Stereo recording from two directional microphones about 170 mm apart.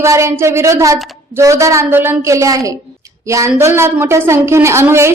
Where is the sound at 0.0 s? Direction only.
15° right (ahead or behind).